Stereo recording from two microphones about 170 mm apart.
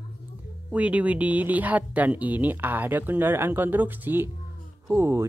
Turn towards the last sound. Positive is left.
turn(degrees=-15)  # may be behind; listen again after turning